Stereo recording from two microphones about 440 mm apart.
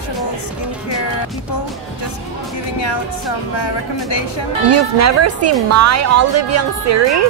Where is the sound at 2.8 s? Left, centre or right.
Left.